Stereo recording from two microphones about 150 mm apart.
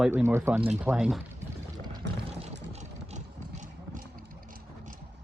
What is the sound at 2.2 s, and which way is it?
Vehicle, 45° right (ahead or behind).